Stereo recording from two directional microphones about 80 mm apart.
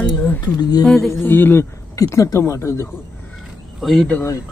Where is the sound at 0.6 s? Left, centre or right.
Left.